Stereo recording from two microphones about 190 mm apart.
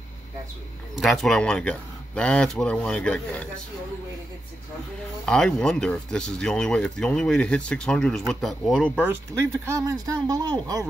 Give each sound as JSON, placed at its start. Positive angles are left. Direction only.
{"t": 0.9, "sound": "speech", "side_deg": 0}
{"t": 5.2, "sound": "speech", "side_deg": 5}